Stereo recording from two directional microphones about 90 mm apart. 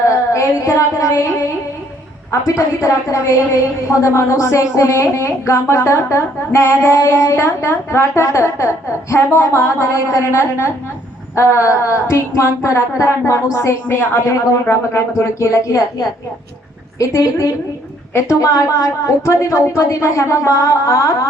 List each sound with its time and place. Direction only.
0.3 s a sound: 35° left (ahead or behind)
3.1 s a woman's voice: 35° left (ahead or behind)
13.8 s a woman's voice: 25° left (ahead or behind)